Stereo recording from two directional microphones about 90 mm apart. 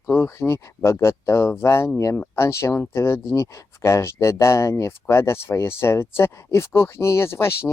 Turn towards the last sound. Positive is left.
turn(degrees=30)  # may be behind; listen again after turning